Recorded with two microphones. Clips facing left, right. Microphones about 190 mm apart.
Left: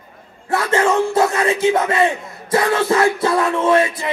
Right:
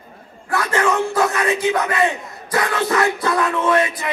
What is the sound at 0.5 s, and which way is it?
Speech, 25° left (ahead or behind).